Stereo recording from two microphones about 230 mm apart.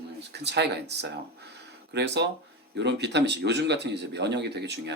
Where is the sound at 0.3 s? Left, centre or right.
Right.